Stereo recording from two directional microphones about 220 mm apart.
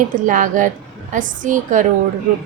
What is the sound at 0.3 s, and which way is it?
A child's voice, 35° right (ahead or behind).